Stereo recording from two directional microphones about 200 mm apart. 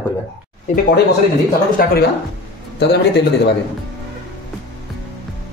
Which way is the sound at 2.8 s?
55° left (ahead or behind).